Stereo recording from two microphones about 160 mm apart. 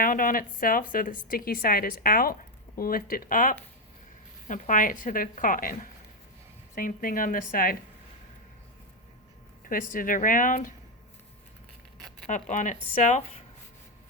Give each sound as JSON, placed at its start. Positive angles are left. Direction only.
{"t": 0.0, "sound": "a woman's voice", "side_deg": 60}
{"t": 9.6, "sound": "a woman's voice", "side_deg": 60}
{"t": 12.3, "sound": "speech", "side_deg": 50}